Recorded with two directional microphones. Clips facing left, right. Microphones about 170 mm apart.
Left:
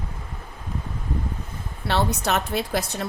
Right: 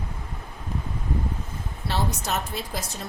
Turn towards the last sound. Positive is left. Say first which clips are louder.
# left 7 dB
turn(degrees=70)  # may be behind; listen again after turning